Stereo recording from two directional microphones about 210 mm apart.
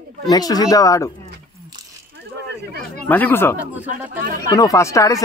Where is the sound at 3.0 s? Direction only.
10° left (ahead or behind).